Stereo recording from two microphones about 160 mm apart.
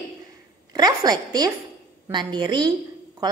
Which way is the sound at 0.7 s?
25° right (ahead or behind).